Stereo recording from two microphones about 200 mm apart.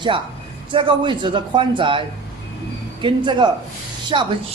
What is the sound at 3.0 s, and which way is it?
Speech, 25° right (ahead or behind).